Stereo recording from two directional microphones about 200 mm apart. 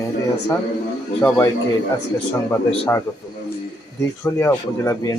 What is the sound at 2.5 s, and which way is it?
Speech, 15° left (ahead or behind).